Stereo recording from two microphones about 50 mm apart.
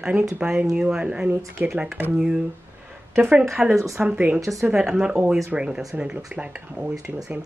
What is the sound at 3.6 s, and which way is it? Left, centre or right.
Speech, centre.